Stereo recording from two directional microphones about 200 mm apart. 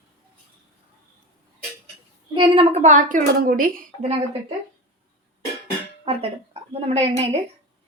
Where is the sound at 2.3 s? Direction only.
30° right (ahead or behind); by 3.9 s 45° right (ahead or behind).